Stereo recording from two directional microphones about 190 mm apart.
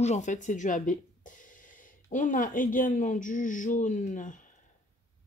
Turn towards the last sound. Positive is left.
turn(degrees=40)  # may be behind; listen again after turning